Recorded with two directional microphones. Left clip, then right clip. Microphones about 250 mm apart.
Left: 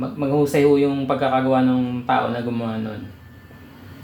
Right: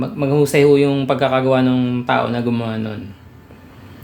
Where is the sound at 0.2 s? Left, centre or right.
Right.